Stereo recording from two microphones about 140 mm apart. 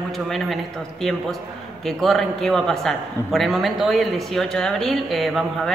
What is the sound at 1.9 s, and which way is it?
A man's voice, centre (ahead or behind).